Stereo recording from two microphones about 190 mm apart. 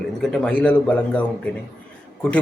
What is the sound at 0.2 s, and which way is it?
A man's voice, 5° left (ahead or behind).